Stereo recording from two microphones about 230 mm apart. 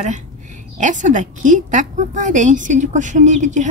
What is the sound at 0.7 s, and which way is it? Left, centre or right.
A woman's voice, right.